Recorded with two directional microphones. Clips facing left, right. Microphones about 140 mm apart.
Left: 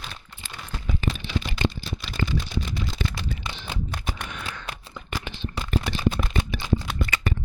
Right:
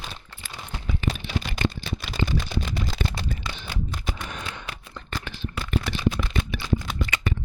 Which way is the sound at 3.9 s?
65° left (ahead or behind).